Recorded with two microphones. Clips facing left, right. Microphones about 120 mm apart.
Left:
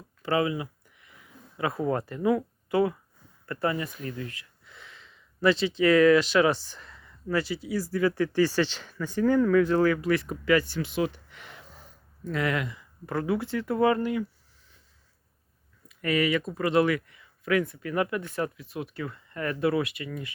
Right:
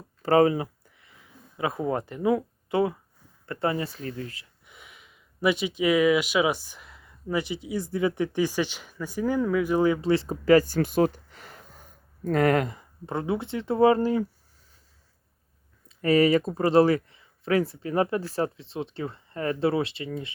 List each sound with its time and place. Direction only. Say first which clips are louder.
0.2 s a sound: right 6 dB; 40° right (ahead or behind); by 3.0 s 25° right (ahead or behind)
3.4 s speech: right 1 dB; 25° right (ahead or behind)
4.6 s speech: left 1 dB; 15° right (ahead or behind); by 12.8 s 45° right (ahead or behind)
13.1 s speech: even; 25° right (ahead or behind)
15.9 s speech: right 6 dB; 30° right (ahead or behind)